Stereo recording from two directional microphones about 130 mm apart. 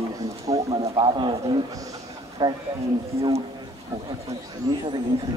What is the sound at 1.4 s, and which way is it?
Speech, 25° right (ahead or behind).